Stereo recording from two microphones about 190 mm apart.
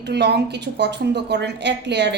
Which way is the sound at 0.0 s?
60° right (ahead or behind).